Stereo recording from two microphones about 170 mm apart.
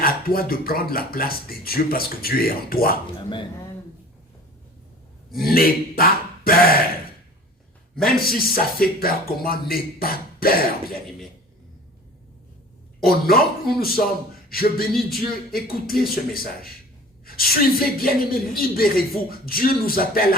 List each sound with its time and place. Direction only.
0.0 s a woman's voice: 60° left (ahead or behind)
3.2 s speech: 30° left (ahead or behind)
5.4 s a woman's voice: 60° left (ahead or behind)
8.5 s a woman's voice: 60° left (ahead or behind)
13.1 s a woman's voice: 60° left (ahead or behind)
14.9 s speech: centre (ahead or behind)
15.6 s a woman's voice: 60° left (ahead or behind)